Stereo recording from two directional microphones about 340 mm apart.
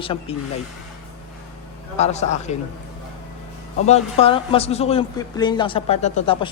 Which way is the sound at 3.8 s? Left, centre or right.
Centre.